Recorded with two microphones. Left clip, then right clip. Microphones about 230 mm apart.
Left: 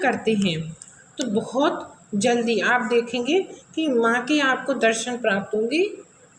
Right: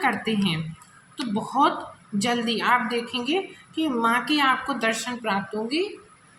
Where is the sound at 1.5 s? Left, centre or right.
Right.